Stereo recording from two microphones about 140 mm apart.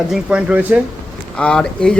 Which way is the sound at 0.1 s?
5° right (ahead or behind).